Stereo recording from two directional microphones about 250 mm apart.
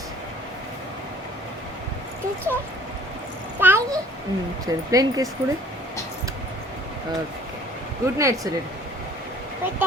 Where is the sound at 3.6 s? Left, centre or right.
Centre.